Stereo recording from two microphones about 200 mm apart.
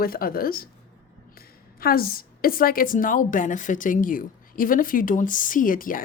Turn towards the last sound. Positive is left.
turn(degrees=45)  # may be behind; listen again after turning